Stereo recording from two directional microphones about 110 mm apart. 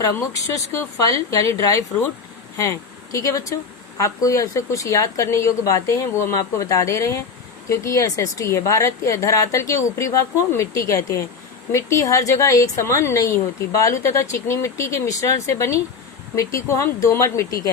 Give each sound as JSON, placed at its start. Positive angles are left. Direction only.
{"t": 0.0, "sound": "a woman's voice", "side_deg": 30}